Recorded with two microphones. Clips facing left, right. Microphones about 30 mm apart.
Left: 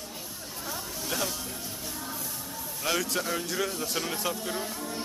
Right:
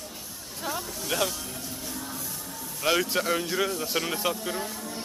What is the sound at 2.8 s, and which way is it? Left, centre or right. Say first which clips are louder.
Speech: right 4 dB; centre.